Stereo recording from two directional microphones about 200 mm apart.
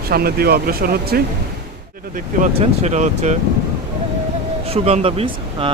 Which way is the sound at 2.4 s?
35° right (ahead or behind).